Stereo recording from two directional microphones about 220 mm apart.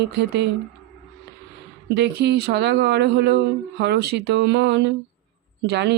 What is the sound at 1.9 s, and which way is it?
Mantra, 50° right (ahead or behind).